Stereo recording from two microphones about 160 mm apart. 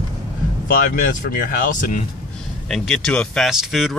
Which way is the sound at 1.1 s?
55° left (ahead or behind).